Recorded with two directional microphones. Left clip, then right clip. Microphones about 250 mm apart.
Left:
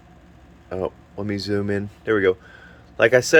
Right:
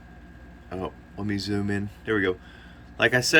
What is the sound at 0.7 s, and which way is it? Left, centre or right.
Speech, left.